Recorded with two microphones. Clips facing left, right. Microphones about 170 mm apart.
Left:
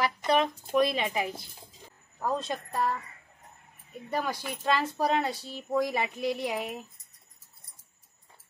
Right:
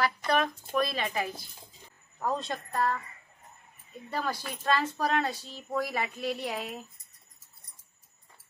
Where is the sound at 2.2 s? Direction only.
5° left (ahead or behind).